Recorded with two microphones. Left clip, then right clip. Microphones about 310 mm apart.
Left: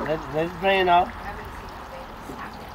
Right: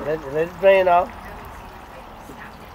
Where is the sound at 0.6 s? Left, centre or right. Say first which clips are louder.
Right 5 dB; centre.